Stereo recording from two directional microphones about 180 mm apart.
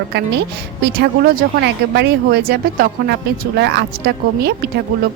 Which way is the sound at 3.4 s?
70° right (ahead or behind).